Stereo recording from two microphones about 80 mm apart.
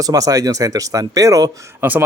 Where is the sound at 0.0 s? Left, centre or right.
Right.